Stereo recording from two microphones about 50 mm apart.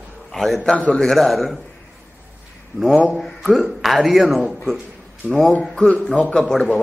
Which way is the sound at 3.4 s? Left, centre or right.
Centre.